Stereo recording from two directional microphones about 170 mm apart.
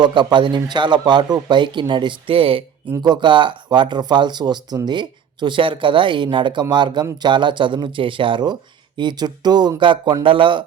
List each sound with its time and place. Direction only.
0.0 s speech: 25° right (ahead or behind)